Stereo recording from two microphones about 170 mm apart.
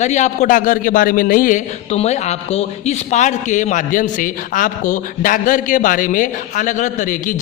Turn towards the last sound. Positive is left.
turn(degrees=50)  # may be behind; listen again after turning